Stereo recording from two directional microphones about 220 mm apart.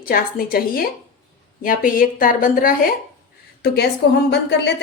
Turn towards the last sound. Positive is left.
turn(degrees=50)  # may be behind; listen again after turning